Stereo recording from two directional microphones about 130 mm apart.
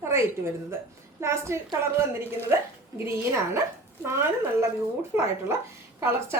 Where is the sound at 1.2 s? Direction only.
20° right (ahead or behind).